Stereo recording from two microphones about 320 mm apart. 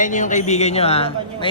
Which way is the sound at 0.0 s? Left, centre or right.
Left.